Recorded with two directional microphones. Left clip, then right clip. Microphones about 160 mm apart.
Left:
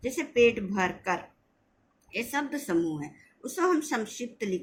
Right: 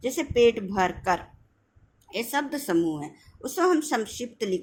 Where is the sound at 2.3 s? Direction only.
30° right (ahead or behind).